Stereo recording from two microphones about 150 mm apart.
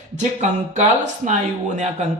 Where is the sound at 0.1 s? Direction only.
50° right (ahead or behind).